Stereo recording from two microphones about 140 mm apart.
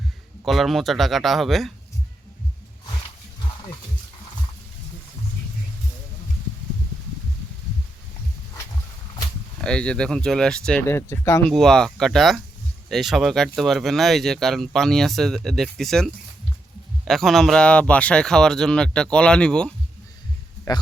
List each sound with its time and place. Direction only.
0.4 s speech: centre (ahead or behind)
9.6 s speech: 5° left (ahead or behind)
10.8 s speech: 20° left (ahead or behind)
11.4 s speech: 5° left (ahead or behind)
20.7 s speech: 30° left (ahead or behind)